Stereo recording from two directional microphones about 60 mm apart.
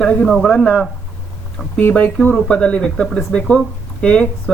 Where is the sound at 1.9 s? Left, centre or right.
Left.